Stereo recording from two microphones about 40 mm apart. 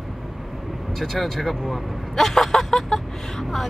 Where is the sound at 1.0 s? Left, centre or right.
Centre.